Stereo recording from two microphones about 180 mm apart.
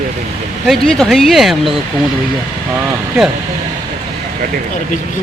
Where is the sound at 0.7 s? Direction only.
5° left (ahead or behind).